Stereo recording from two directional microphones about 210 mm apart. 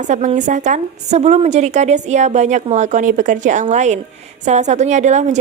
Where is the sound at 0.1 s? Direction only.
35° right (ahead or behind).